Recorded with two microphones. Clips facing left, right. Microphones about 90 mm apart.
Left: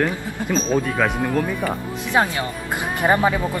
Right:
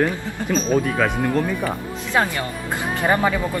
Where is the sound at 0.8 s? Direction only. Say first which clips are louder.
Even; centre (ahead or behind).